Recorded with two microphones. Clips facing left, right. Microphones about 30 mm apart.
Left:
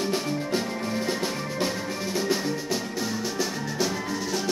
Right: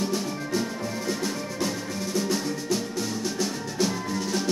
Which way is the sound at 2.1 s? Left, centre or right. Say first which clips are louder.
Left 1 dB; centre.